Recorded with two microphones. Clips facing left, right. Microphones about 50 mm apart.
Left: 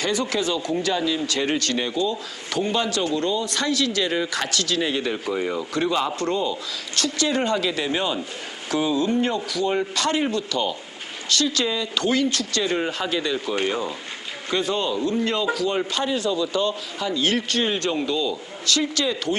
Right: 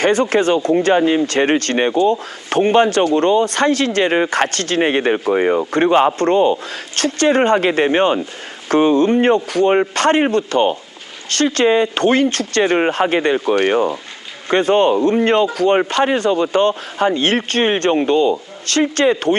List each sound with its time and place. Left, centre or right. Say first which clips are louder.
0.0 s speech: right 9 dB; right